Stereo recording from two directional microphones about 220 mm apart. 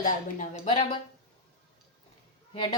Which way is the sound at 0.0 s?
35° left (ahead or behind).